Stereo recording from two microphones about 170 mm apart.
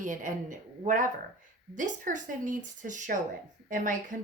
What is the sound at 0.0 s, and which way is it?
Speech, 50° right (ahead or behind).